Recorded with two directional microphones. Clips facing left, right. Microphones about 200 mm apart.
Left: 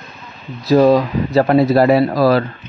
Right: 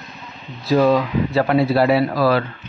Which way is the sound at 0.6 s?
40° left (ahead or behind).